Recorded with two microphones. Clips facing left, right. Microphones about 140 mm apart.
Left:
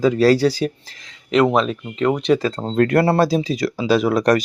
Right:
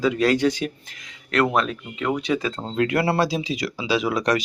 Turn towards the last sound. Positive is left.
turn(degrees=45)  # may be behind; listen again after turning